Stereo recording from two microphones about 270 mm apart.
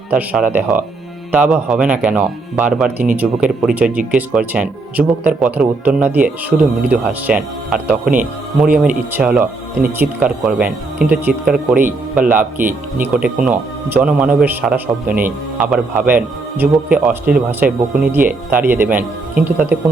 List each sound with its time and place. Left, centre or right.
0.1 s speech: centre
8.0 s speech: right
8.7 s a man's voice: centre